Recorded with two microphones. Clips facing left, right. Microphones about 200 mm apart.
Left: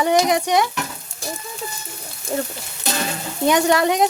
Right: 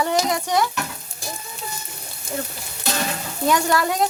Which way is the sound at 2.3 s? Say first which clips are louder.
Left 5 dB; 35° left (ahead or behind).